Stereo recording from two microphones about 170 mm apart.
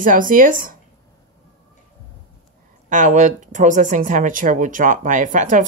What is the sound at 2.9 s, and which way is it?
Speech, 50° right (ahead or behind).